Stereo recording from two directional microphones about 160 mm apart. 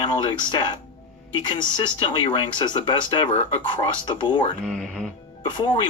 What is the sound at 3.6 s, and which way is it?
Speech, 30° left (ahead or behind).